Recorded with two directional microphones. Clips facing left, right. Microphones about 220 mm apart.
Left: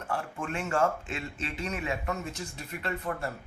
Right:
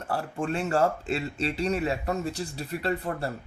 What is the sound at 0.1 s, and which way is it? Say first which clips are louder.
Speech: right 5 dB; 35° right (ahead or behind).